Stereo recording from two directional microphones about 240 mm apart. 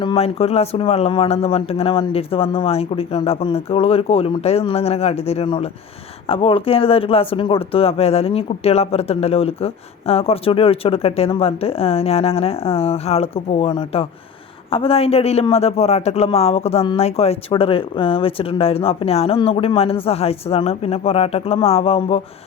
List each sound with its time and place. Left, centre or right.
0.0 s speech: left